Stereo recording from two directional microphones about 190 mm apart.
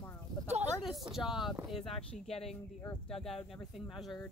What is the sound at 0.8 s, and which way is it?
Speech, centre (ahead or behind).